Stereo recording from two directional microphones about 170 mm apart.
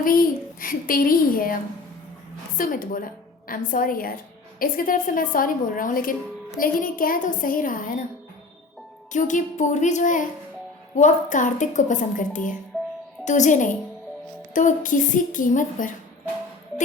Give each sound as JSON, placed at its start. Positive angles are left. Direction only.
{"t": 0.0, "sound": "a child's voice", "side_deg": 55}
{"t": 2.6, "sound": "a child's voice", "side_deg": 55}
{"t": 9.1, "sound": "a woman's voice", "side_deg": 45}